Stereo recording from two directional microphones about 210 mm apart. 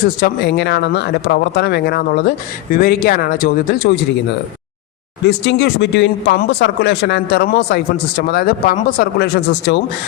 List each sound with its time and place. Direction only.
0.2 s speech: 50° left (ahead or behind)
5.2 s speech: 55° left (ahead or behind)